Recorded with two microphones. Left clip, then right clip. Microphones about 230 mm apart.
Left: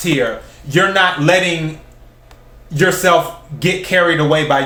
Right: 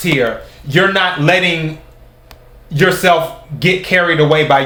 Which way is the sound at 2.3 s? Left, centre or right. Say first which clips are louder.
Right 2 dB; centre.